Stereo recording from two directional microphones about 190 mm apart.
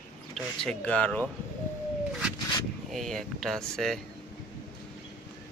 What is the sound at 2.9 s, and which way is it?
Speech, centre (ahead or behind).